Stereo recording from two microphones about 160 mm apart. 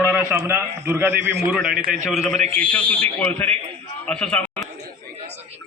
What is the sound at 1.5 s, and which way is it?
A man's voice, centre (ahead or behind).